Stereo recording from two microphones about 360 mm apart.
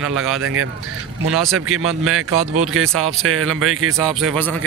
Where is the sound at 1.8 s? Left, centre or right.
Right.